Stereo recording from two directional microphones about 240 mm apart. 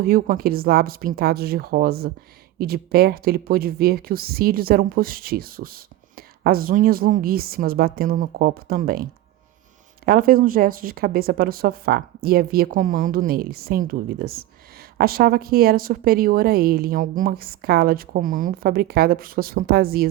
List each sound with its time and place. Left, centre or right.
0.0 s speech: right
10.1 s speech: right